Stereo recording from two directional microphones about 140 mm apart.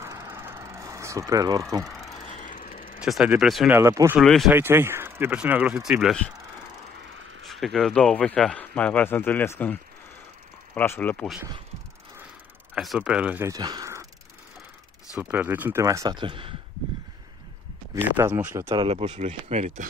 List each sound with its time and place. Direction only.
0.0 s vehicle: 20° right (ahead or behind)
2.4 s vehicle: 70° left (ahead or behind)
3.0 s speech: 5° right (ahead or behind)
3.7 s speech: 20° right (ahead or behind)
4.2 s speech: centre (ahead or behind)
4.5 s speech: 15° right (ahead or behind)
7.4 s speech: centre (ahead or behind)
12.7 s speech: 5° right (ahead or behind)
13.5 s speech: 30° right (ahead or behind)
15.1 s speech: 15° right (ahead or behind)
16.2 s speech: 40° right (ahead or behind)
18.1 s speech: 20° right (ahead or behind)
18.7 s speech: 35° right (ahead or behind); by 19.7 s 55° right (ahead or behind)